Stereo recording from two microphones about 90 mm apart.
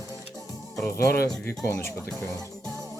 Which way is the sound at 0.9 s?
35° left (ahead or behind).